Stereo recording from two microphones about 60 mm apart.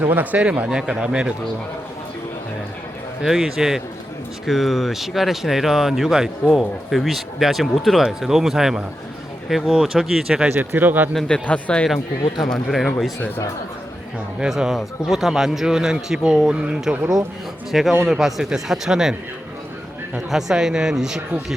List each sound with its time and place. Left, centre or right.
0.0 s speech: right
0.7 s speech: centre
3.2 s speech: centre
10.8 s speech: right
11.4 s speech: centre
12.5 s speech: centre
14.3 s speech: centre
17.7 s speech: centre
20.1 s speech: centre